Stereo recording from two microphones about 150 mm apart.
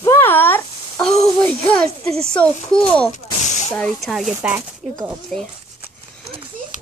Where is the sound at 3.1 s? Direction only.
50° left (ahead or behind).